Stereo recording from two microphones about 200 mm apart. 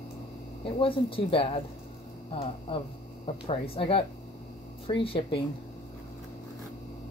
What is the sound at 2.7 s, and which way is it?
Speech, 25° left (ahead or behind).